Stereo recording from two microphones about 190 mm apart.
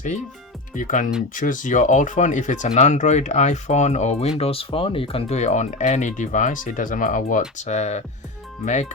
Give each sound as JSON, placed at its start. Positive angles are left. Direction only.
{"t": 0.7, "sound": "speech", "side_deg": 45}